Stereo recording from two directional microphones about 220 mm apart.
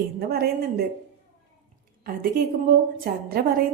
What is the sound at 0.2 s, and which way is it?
Speech, 45° right (ahead or behind).